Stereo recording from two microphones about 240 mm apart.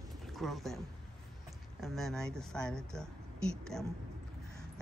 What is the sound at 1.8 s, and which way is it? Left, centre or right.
Speech, centre.